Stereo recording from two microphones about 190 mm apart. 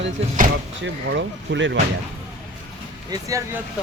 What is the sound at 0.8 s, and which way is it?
Speech, 70° right (ahead or behind).